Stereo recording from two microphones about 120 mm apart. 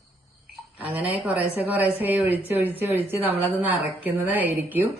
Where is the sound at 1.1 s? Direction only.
10° right (ahead or behind).